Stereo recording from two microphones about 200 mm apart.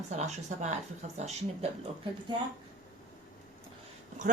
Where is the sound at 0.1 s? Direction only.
35° right (ahead or behind).